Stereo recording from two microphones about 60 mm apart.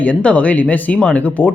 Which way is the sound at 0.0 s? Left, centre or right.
Left.